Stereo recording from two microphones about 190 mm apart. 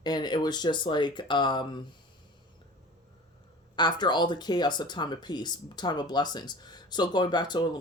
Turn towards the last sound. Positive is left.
turn(degrees=20)  # may be behind; listen again after turning